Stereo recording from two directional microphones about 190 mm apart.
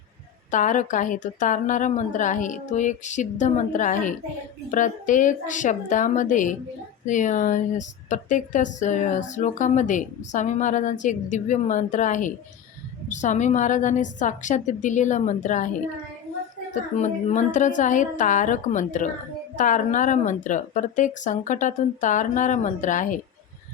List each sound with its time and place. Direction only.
0.5 s speech: 40° left (ahead or behind)
16.7 s speech: 40° left (ahead or behind)